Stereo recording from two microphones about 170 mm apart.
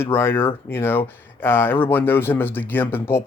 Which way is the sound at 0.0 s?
15° left (ahead or behind).